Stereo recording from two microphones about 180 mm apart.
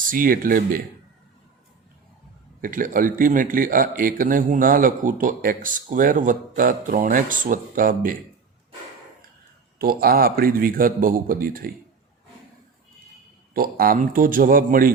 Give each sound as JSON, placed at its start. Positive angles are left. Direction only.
{"t": 0.1, "sound": "a man's voice", "side_deg": -50}
{"t": 2.6, "sound": "a man's voice", "side_deg": -50}
{"t": 9.7, "sound": "a man's voice", "side_deg": -55}
{"t": 13.5, "sound": "a man's voice", "side_deg": -55}